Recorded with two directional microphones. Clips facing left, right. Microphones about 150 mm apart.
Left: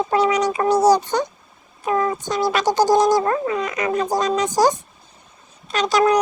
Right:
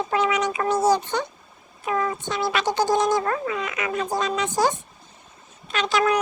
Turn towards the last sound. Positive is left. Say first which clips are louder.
# left 5 dB
turn(degrees=40)  # may be behind; listen again after turning